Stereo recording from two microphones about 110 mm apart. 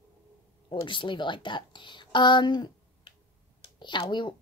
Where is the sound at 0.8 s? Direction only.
45° left (ahead or behind).